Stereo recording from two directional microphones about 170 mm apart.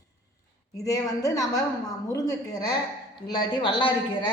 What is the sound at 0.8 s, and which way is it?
A woman's voice, 20° left (ahead or behind).